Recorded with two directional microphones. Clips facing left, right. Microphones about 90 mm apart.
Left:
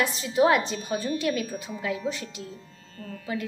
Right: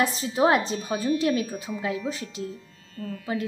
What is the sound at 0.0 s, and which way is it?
A woman's voice, 35° right (ahead or behind).